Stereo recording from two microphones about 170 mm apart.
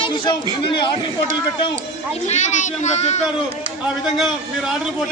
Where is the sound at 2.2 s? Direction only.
40° left (ahead or behind).